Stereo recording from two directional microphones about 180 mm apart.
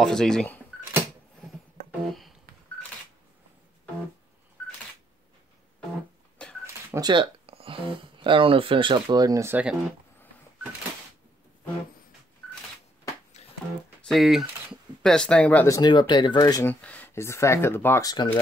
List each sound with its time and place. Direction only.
0.0 s speech: 5° left (ahead or behind)
2.0 s telephone dialing: centre (ahead or behind)
6.6 s a sound: 15° right (ahead or behind)
7.1 s speech: 30° right (ahead or behind); by 9.8 s 10° right (ahead or behind)
13.4 s music: 40° left (ahead or behind)
14.1 s speech: centre (ahead or behind); by 16.7 s 20° left (ahead or behind)
16.8 s speech: 10° left (ahead or behind)